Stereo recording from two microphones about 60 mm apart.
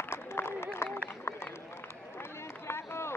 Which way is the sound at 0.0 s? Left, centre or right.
Left.